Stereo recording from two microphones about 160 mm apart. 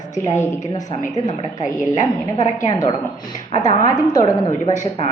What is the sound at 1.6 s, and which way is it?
A woman's voice, 50° left (ahead or behind).